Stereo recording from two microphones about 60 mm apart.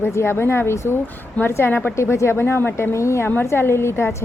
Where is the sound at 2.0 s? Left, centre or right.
Left.